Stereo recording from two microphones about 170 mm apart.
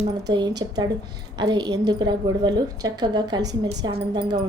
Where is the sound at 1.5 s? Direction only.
25° right (ahead or behind).